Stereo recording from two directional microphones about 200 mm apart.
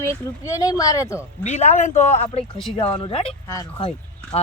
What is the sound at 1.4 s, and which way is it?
Speech, 35° left (ahead or behind).